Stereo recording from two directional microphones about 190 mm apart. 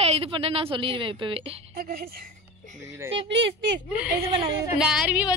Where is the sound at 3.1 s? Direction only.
70° right (ahead or behind).